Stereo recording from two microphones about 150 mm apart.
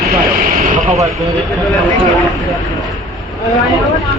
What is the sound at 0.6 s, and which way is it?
Vehicle, 50° right (ahead or behind).